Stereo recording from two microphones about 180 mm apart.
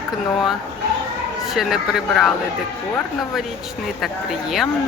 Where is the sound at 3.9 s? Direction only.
Centre (ahead or behind).